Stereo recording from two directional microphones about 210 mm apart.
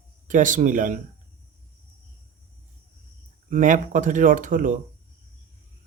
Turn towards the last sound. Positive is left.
turn(degrees=-40)  # may be behind; listen again after turning